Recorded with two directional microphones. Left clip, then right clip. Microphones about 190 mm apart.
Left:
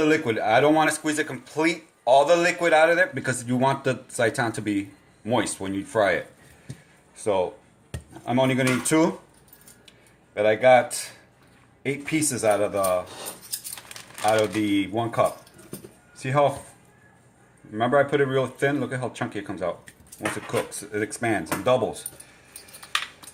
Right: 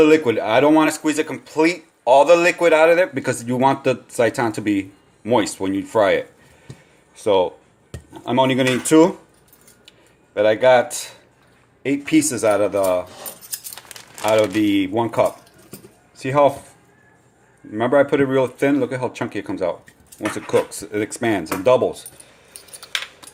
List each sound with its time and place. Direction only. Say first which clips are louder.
0.0 s speech: right 7 dB; 40° right (ahead or behind)
8.2 s speech: right 5 dB; 35° right (ahead or behind)
10.3 s speech: right 3 dB; 40° right (ahead or behind)
14.3 s speech: right 5 dB; 45° right (ahead or behind)
17.7 s speech: right 5 dB; 40° right (ahead or behind)